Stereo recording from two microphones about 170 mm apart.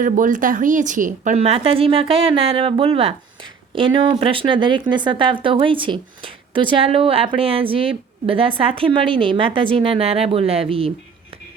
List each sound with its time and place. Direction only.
0.0 s speech: 50° right (ahead or behind); by 10.9 s 35° right (ahead or behind)